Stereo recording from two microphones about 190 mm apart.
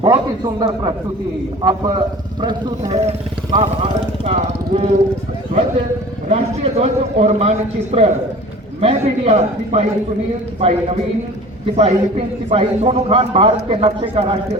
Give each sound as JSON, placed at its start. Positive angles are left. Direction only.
{"t": 0.0, "sound": "a man's voice", "side_deg": -20}
{"t": 3.0, "sound": "speech", "side_deg": -35}
{"t": 6.2, "sound": "a man's voice", "side_deg": -35}